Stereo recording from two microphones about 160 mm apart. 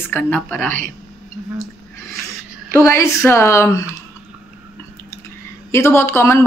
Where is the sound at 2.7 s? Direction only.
15° left (ahead or behind).